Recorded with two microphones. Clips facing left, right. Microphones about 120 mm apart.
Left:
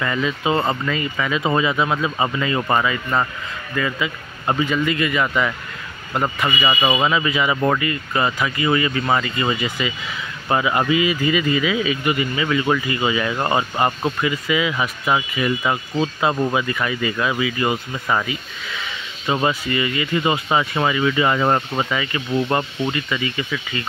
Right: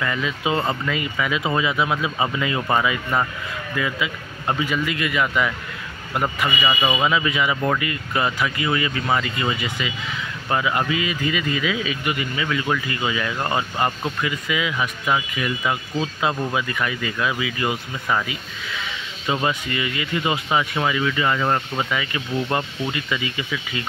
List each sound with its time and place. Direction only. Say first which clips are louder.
0.0 s speech: left 3 dB; centre (ahead or behind)
6.6 s speech: left 3 dB; 20° left (ahead or behind)
7.0 s speech: left 1 dB; centre (ahead or behind)
14.2 s speech: left 4 dB; centre (ahead or behind)
19.4 s speech: left 3 dB; centre (ahead or behind)
21.2 s speech: left 4 dB; 20° left (ahead or behind)
21.9 s speech: left 4 dB; centre (ahead or behind)